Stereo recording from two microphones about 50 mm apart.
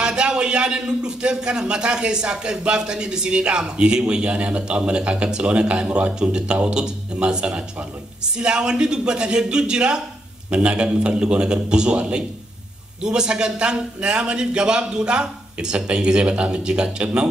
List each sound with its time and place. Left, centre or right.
0.0 s a man's voice: centre